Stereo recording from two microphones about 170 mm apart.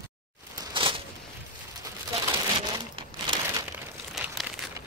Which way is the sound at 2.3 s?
25° right (ahead or behind).